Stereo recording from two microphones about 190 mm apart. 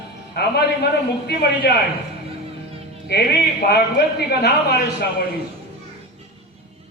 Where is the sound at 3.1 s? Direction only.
60° left (ahead or behind).